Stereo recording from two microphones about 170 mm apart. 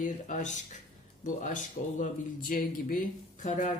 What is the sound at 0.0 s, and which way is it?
A man's voice, 50° left (ahead or behind).